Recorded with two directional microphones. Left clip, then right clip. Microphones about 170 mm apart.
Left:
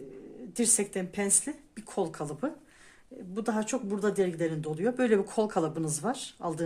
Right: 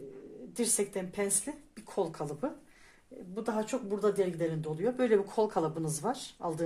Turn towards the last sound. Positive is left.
turn(degrees=25)  # may be behind; listen again after turning